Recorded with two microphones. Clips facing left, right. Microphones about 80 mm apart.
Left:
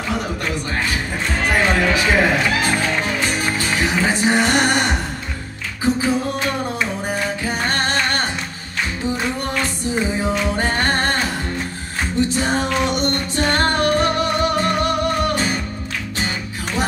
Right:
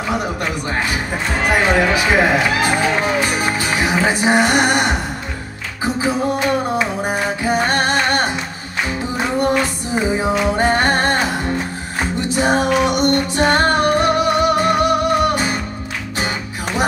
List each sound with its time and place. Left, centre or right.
1.4 s music: centre
6.8 s music: centre
9.4 s music: centre